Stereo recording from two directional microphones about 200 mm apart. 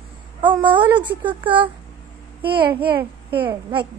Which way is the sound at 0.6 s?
25° right (ahead or behind).